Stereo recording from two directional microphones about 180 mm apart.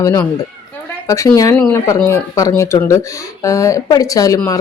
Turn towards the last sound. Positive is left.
turn(degrees=20)  # may be behind; listen again after turning